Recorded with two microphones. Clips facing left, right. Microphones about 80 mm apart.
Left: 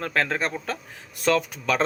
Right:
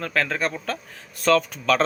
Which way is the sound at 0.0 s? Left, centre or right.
Left.